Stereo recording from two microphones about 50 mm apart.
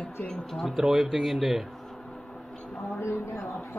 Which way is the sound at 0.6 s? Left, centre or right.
Centre.